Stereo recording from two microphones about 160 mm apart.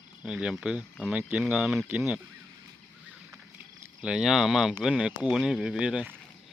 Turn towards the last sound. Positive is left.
turn(degrees=-10)  # may be behind; listen again after turning